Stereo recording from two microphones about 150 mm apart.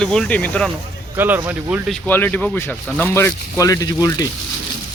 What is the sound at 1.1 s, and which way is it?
Speech, 10° right (ahead or behind).